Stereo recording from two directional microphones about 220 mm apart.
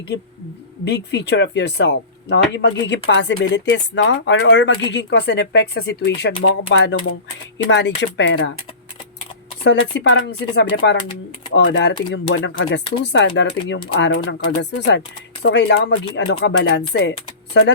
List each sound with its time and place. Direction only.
0.9 s speech: 50° left (ahead or behind)
9.6 s speech: 50° left (ahead or behind)